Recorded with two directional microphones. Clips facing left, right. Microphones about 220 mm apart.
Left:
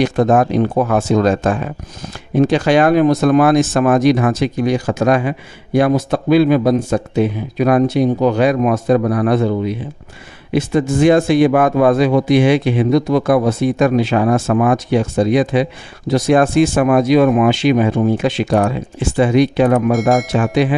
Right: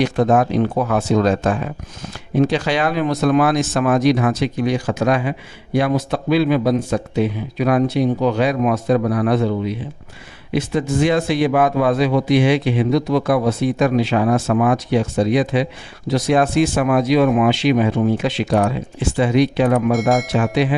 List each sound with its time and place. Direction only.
0.0 s a man's voice: 45° left (ahead or behind)
19.9 s speech: centre (ahead or behind)